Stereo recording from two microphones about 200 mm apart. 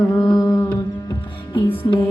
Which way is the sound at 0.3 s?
20° left (ahead or behind).